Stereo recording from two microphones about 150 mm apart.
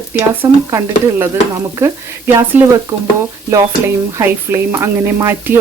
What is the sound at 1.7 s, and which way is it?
Speech, 20° right (ahead or behind).